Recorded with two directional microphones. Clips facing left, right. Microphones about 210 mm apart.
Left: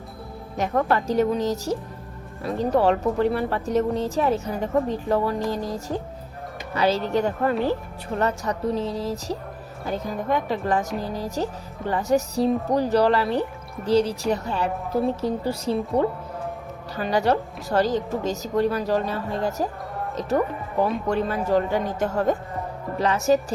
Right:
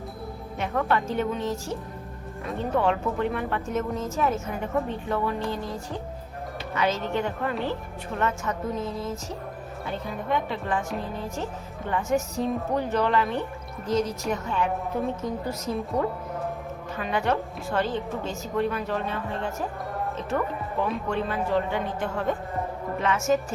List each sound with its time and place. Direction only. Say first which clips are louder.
0.5 s speech: left 4 dB; 35° left (ahead or behind)
6.7 s speech: left 5 dB; 35° left (ahead or behind)
21.1 s speech: left 4 dB; 40° left (ahead or behind)